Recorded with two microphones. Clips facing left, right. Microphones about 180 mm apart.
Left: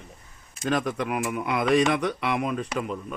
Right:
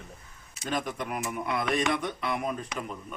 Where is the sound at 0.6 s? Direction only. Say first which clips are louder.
Left 6 dB; 85° left.